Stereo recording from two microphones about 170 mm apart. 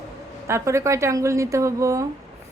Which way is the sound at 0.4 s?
15° right (ahead or behind).